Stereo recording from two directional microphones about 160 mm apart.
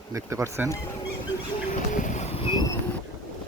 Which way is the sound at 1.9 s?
50° left (ahead or behind).